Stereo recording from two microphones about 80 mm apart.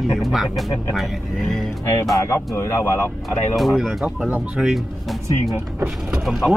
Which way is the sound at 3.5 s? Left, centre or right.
Centre.